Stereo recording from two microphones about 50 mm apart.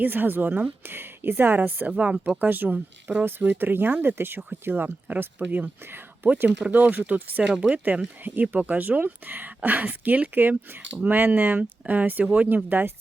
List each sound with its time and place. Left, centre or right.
0.0 s speech: right
2.4 s speech: right
3.2 s speech: right
8.2 s speech: right
12.2 s speech: right
12.6 s speech: right